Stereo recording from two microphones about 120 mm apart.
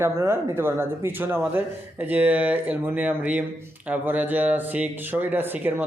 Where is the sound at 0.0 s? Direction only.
20° right (ahead or behind).